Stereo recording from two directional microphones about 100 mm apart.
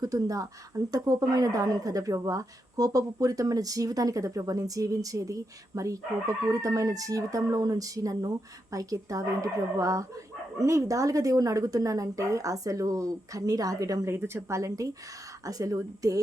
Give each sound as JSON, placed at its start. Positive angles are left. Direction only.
{"t": 0.0, "sound": "speech", "side_deg": -35}